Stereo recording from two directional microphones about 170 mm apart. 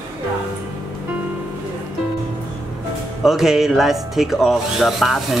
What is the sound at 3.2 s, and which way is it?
Speech, centre (ahead or behind).